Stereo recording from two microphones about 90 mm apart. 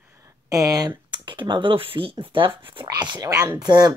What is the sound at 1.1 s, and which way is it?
Speech, 60° right (ahead or behind).